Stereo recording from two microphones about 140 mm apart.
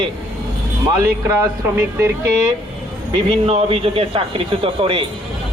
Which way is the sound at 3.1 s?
45° right (ahead or behind).